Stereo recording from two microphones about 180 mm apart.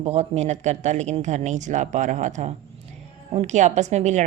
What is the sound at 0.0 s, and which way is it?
A woman's voice, 35° right (ahead or behind).